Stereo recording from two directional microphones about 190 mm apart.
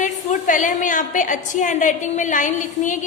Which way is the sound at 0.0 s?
40° left (ahead or behind).